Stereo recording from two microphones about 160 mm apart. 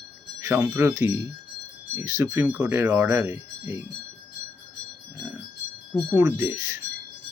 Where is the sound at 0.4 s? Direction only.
10° right (ahead or behind).